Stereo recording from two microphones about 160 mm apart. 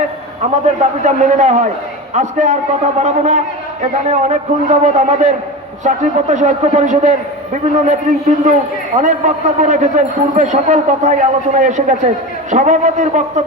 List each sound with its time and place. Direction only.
0.4 s a man's voice: 50° right (ahead or behind)
9.0 s a man's voice: 50° right (ahead or behind)